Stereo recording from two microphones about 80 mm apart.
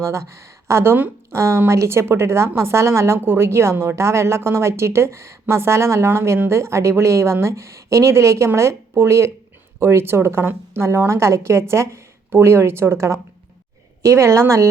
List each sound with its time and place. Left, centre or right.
0.0 s a woman's voice: right